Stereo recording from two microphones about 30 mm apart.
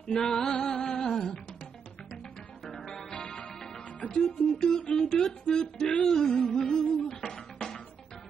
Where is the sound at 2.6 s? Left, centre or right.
Centre.